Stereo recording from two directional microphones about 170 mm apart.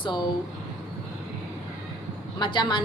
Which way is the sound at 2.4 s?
25° left (ahead or behind).